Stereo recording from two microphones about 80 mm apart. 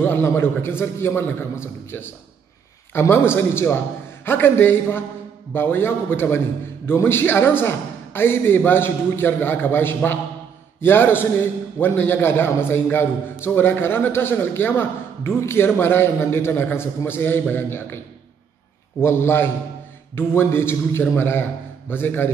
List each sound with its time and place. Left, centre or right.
0.0 s a man's voice: left
18.9 s a man's voice: left